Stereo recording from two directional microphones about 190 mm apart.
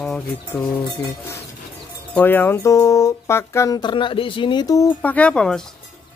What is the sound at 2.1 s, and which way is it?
Speech, 10° left (ahead or behind).